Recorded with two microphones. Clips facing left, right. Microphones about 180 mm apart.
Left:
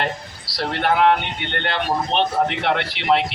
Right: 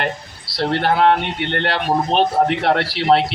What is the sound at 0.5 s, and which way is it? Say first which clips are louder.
A man's voice: right 3 dB; 30° right (ahead or behind).